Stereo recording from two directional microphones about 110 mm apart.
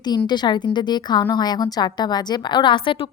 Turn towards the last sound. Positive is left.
turn(degrees=50)  # may be behind; listen again after turning